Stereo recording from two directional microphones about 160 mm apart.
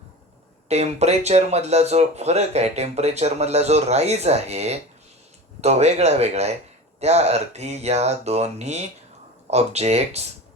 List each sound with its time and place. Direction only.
0.7 s speech: 40° right (ahead or behind)